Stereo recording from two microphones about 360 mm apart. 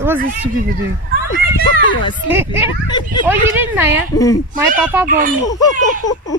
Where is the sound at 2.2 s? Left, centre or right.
Centre.